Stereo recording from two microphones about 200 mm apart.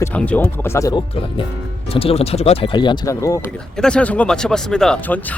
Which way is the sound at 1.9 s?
30° left (ahead or behind).